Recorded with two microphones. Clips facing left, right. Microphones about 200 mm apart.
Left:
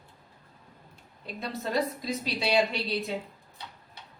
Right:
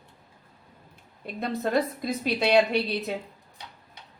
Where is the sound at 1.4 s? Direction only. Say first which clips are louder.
Right 4 dB; 55° right (ahead or behind).